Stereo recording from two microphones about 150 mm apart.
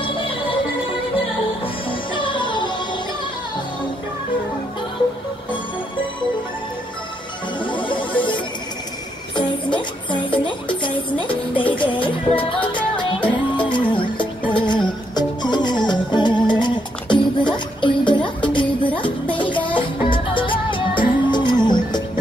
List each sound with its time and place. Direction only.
1.9 s music: 35° left (ahead or behind)
7.6 s music: 35° left (ahead or behind)